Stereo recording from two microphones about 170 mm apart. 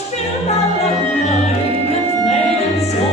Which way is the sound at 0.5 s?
40° left (ahead or behind).